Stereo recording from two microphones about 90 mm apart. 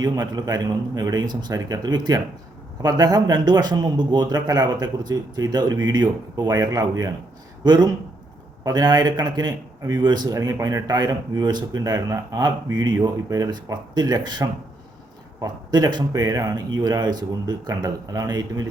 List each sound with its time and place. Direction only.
0.0 s speech: 50° right (ahead or behind)
7.6 s speech: 55° right (ahead or behind)